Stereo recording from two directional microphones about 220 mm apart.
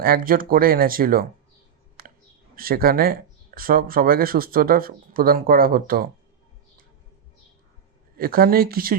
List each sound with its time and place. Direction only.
0.0 s speech: 40° right (ahead or behind)
2.0 s a sound: 40° right (ahead or behind)
2.6 s speech: 40° right (ahead or behind)
8.1 s speech: 45° right (ahead or behind)